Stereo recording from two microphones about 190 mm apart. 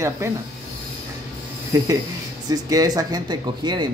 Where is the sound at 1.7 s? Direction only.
15° right (ahead or behind).